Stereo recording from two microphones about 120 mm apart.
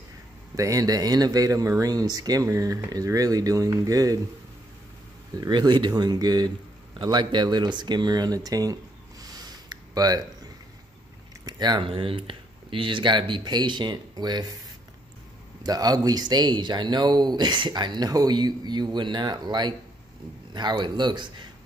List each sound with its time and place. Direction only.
0.6 s speech: 30° right (ahead or behind)
5.4 s speech: 40° right (ahead or behind)
9.9 s speech: 30° right (ahead or behind)
15.6 s speech: 30° right (ahead or behind)